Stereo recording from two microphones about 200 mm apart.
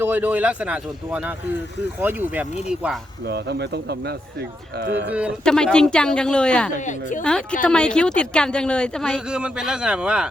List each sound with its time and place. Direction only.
0.0 s speech: 10° right (ahead or behind)
3.2 s speech: 55° right (ahead or behind)
5.1 s speech: centre (ahead or behind)
6.7 s a woman's voice: 40° left (ahead or behind)
7.2 s speech: 5° left (ahead or behind)